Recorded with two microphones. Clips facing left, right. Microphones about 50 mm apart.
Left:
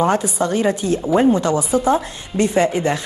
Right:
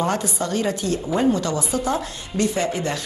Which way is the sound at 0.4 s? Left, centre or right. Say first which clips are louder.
Left 5 dB; left.